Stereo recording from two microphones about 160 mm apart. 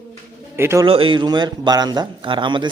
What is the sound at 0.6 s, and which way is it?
Speech, 15° right (ahead or behind).